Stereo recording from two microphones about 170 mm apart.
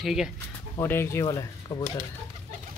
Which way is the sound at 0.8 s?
15° left (ahead or behind).